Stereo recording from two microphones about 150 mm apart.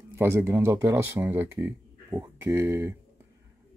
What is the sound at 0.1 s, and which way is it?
Speech, 15° right (ahead or behind).